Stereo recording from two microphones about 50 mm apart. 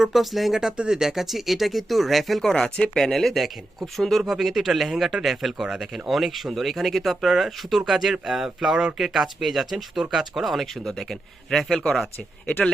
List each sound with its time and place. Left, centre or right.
0.0 s speech: centre
0.8 s speech: centre
12.5 s speech: left